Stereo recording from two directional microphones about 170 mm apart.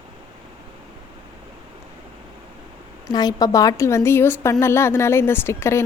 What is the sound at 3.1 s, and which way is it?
A woman's voice, 25° left (ahead or behind).